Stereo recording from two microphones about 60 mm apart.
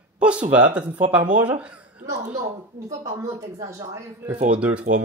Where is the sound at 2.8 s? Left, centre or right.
Right.